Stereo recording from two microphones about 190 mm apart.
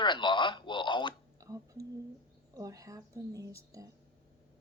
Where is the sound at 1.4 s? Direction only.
15° right (ahead or behind).